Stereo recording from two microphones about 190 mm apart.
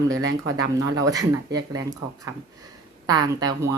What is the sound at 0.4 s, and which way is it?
Speech, 20° right (ahead or behind).